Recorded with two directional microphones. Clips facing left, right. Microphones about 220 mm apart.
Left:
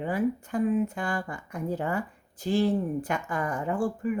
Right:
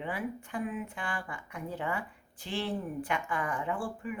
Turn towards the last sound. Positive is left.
turn(degrees=40)  # may be behind; listen again after turning